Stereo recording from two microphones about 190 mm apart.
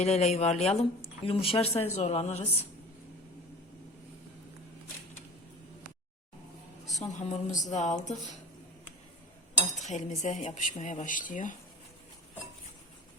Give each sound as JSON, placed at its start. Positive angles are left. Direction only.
{"t": 0.0, "sound": "speech", "side_deg": 35}
{"t": 7.1, "sound": "speech", "side_deg": 40}
{"t": 9.9, "sound": "speech", "side_deg": 40}